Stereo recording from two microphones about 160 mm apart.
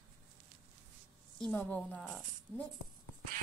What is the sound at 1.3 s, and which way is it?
Speech, 5° left (ahead or behind).